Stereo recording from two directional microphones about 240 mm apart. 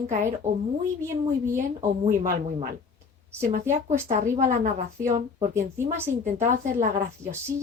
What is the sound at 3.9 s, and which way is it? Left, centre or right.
Speech, right.